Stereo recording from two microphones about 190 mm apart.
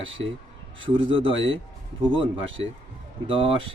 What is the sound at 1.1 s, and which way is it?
Speech, 25° right (ahead or behind).